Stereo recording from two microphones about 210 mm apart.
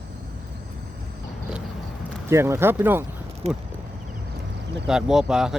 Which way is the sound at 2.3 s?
10° right (ahead or behind).